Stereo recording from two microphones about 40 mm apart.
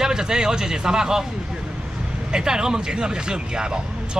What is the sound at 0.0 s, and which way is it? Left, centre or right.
Speech, centre.